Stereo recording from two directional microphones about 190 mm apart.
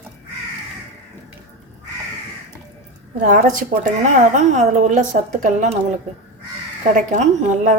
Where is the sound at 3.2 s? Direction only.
45° right (ahead or behind).